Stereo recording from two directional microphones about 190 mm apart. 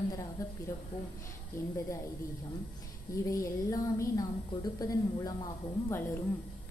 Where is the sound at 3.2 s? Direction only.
15° left (ahead or behind).